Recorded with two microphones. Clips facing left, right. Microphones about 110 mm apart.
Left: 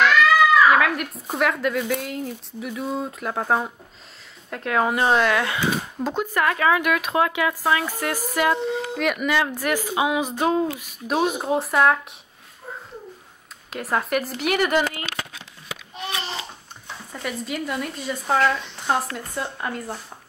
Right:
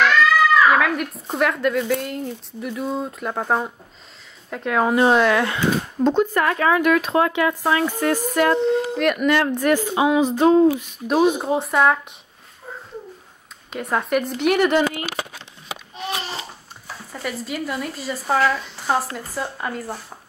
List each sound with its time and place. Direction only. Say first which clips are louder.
0.0 s speech: even; centre (ahead or behind)
13.7 s speech: right 2 dB; centre (ahead or behind)
16.8 s speech: right 2 dB; centre (ahead or behind)